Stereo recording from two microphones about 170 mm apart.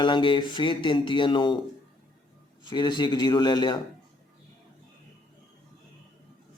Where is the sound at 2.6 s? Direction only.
25° left (ahead or behind).